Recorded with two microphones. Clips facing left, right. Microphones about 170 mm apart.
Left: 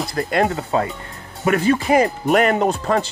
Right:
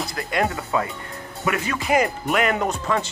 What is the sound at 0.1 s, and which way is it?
Speech, 35° left (ahead or behind).